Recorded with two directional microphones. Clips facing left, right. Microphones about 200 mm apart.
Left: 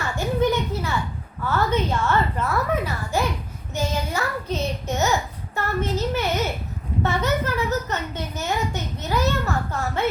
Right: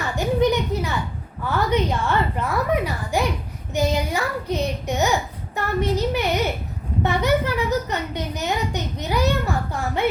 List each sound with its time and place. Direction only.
0.2 s a sound: 15° right (ahead or behind)
1.5 s a child's voice: 15° right (ahead or behind)
3.8 s child singing: 15° right (ahead or behind)
5.5 s a child's voice: 15° right (ahead or behind)